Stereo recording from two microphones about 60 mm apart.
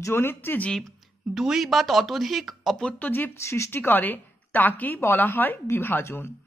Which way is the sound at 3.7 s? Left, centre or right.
Left.